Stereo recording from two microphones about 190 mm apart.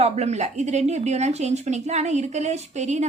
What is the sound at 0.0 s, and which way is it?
Speech, 35° right (ahead or behind).